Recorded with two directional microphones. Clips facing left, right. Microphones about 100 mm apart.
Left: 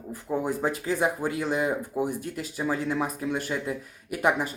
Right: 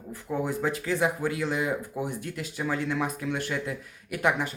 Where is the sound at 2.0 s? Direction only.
15° left (ahead or behind).